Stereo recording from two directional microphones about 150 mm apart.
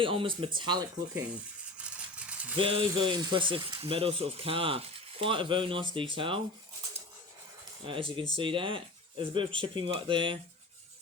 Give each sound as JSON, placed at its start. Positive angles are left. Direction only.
{"t": 0.0, "sound": "speech", "side_deg": -35}
{"t": 1.8, "sound": "a sound", "side_deg": -10}
{"t": 2.6, "sound": "speech", "side_deg": -40}
{"t": 7.9, "sound": "speech", "side_deg": -35}